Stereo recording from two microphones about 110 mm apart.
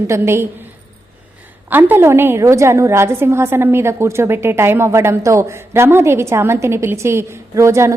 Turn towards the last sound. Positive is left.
turn(degrees=-25)  # may be behind; listen again after turning